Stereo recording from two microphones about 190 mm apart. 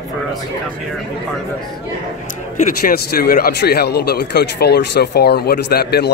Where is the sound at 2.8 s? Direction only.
50° left (ahead or behind).